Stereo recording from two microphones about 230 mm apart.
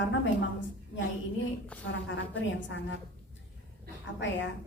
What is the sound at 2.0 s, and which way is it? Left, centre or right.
Speech, left.